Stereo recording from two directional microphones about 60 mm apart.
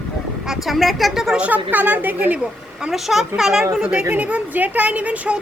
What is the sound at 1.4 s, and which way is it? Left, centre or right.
Speech, right.